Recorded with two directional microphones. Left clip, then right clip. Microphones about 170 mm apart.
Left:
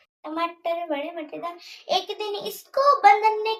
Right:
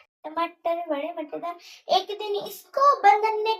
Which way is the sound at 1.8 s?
15° left (ahead or behind).